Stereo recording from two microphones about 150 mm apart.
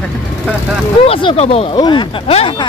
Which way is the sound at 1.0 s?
40° left (ahead or behind).